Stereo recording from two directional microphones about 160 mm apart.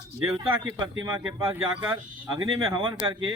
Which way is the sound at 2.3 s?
30° right (ahead or behind).